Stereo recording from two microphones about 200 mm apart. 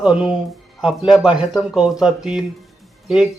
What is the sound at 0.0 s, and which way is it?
Speech, 5° right (ahead or behind).